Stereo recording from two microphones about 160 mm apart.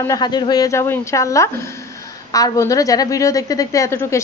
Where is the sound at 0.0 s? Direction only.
25° left (ahead or behind).